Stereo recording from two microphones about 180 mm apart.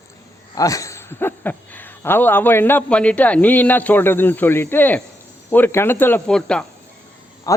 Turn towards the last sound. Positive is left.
turn(degrees=20)  # may be behind; listen again after turning